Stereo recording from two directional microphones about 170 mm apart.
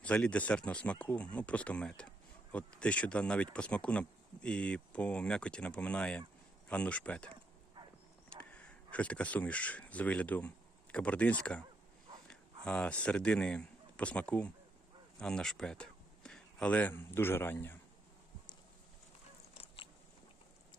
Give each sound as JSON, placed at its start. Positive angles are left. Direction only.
{"t": 0.0, "sound": "speech", "side_deg": 5}
{"t": 8.4, "sound": "speech", "side_deg": 5}
{"t": 19.6, "sound": "biting", "side_deg": 30}